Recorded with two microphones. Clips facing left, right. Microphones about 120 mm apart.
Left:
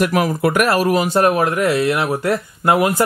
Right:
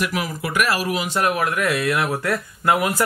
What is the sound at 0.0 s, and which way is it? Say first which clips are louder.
Speech: left 9 dB; 50° left (ahead or behind).